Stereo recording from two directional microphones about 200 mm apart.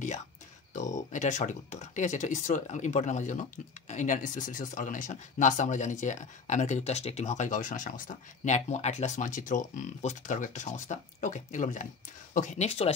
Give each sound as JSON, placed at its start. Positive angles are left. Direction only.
{"t": 0.7, "sound": "speech", "side_deg": 40}